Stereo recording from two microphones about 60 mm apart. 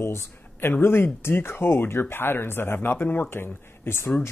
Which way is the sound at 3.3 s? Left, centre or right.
Left.